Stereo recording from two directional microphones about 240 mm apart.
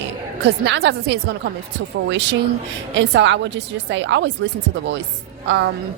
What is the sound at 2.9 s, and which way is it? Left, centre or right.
A woman's voice, right.